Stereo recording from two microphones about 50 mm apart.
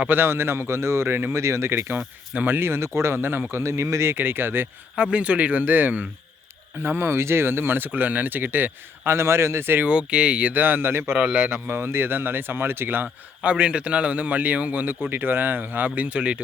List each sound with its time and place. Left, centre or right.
0.1 s a man's voice: right
1.4 s a man's voice: right
3.5 s a man's voice: right
4.1 s speech: right
5.1 s a man's voice: right
6.7 s speech: right
9.1 s a man's voice: right
9.8 s a man's voice: right
10.5 s speech: right
11.1 s a man's voice: right
11.7 s speech: right
13.4 s a man's voice: right
15.1 s speech: right